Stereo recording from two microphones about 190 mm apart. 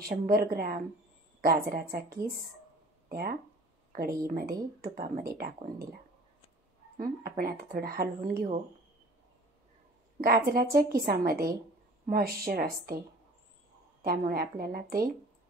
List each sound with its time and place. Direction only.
0.0 s speech: 50° right (ahead or behind)
3.1 s speech: 55° right (ahead or behind)
7.0 s speech: 50° right (ahead or behind)
10.2 s speech: 50° right (ahead or behind)
14.0 s speech: 50° right (ahead or behind)